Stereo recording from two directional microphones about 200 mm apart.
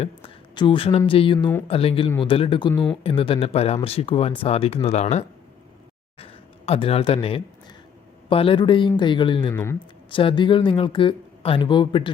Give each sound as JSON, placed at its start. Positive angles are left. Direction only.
{"t": 0.0, "sound": "speech", "side_deg": 25}
{"t": 9.5, "sound": "speech", "side_deg": 15}
{"t": 10.1, "sound": "speech", "side_deg": 25}